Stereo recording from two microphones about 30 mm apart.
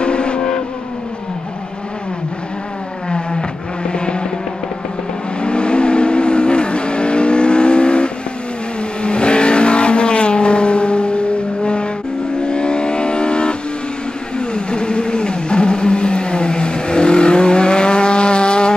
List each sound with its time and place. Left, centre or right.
0.0 s vehicle: left
3.1 s vehicle: left
5.4 s vehicle: left